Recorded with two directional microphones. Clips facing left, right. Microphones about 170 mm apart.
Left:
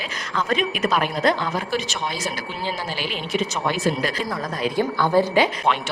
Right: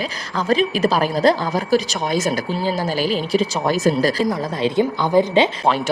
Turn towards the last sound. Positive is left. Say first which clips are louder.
# right 3 dB
turn(degrees=-20)  # may be behind; listen again after turning